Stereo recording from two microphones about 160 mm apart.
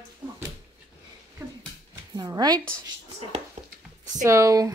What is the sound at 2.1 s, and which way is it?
Speech, 25° right (ahead or behind).